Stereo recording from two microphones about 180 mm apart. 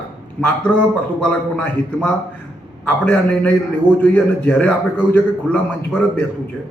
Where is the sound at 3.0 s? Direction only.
10° left (ahead or behind).